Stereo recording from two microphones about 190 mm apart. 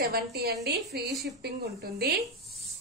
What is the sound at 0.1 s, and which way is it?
Speech, 55° right (ahead or behind).